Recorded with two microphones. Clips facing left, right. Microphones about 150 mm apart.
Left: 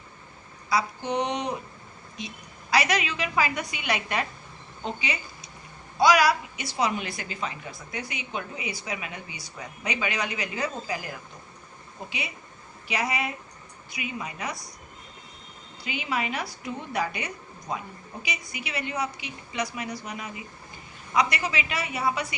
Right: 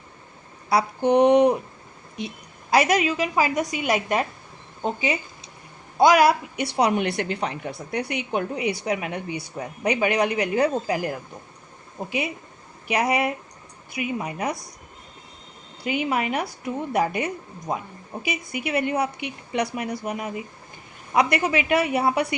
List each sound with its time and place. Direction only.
0.7 s a woman's voice: 60° right (ahead or behind)
12.9 s a woman's voice: 55° right (ahead or behind)
15.8 s a woman's voice: 55° right (ahead or behind)